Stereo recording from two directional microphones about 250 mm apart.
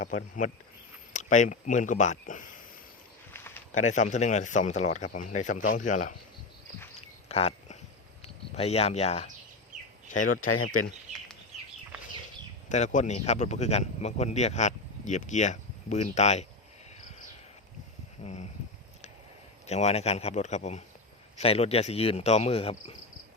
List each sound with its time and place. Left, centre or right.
0.0 s speech: left
3.3 s a sound: centre
3.8 s speech: left
7.3 s a sound: left
8.2 s speech: left
10.4 s speech: left
12.6 s speech: left
18.2 s a sound: left
19.6 s speech: left